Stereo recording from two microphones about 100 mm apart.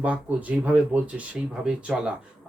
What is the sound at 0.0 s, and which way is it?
A man's voice, 15° right (ahead or behind).